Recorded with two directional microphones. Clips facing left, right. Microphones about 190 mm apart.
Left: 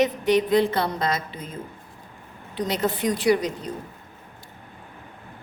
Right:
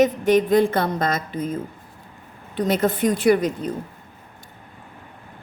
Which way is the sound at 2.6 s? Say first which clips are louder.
Right 5 dB; 50° right (ahead or behind).